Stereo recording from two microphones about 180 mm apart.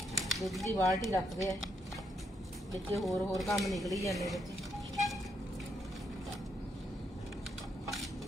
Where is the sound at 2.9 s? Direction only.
Centre (ahead or behind).